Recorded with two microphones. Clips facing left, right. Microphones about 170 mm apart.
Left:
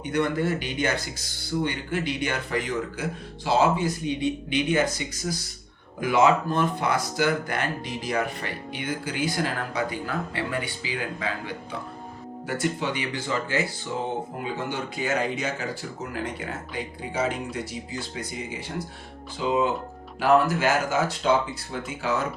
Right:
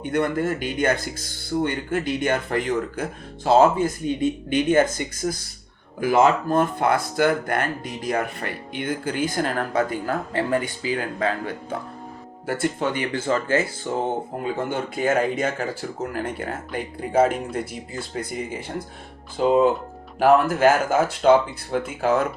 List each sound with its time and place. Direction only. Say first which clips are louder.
0.0 s speech: right 2 dB; 50° right (ahead or behind)